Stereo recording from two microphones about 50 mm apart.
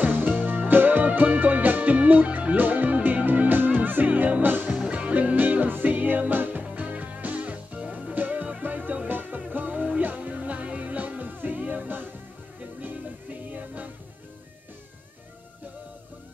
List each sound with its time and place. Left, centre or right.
0.0 s music: right
4.7 s music: right
8.1 s music: right